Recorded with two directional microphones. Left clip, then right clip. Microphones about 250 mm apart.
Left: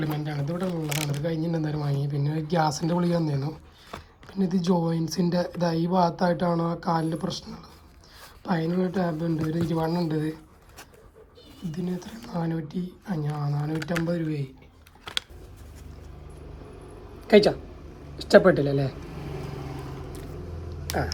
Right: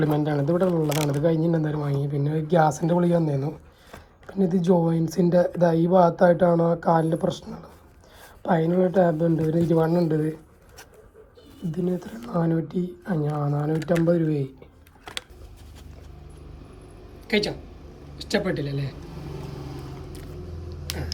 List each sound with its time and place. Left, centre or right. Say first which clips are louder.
0.0 s speech: right 8 dB; centre
11.7 s speech: right 7 dB; centre
17.2 s speech: left 7 dB; left
18.9 s vehicle: left 1 dB; centre